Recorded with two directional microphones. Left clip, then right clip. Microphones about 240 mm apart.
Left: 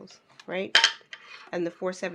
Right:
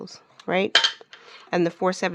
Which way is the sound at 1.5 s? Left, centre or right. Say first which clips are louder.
Right 8 dB; right.